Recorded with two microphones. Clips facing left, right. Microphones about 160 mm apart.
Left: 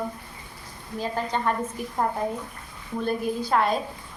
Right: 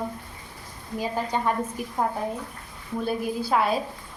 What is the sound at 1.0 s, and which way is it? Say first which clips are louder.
Speech: even; 10° right (ahead or behind).